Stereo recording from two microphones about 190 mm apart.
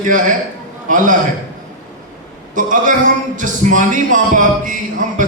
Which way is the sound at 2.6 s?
45° right (ahead or behind).